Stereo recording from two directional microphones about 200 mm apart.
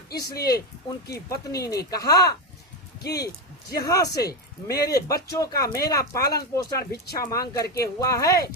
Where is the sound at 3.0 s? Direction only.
55° left (ahead or behind).